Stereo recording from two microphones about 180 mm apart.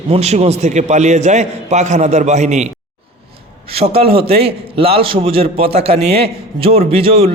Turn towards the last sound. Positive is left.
turn(degrees=-30)  # may be behind; listen again after turning